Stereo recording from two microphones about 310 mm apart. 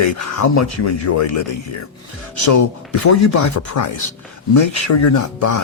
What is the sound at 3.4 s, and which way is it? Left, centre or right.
Speech, left.